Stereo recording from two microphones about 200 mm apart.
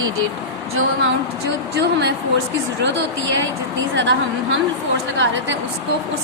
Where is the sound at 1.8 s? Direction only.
60° right (ahead or behind).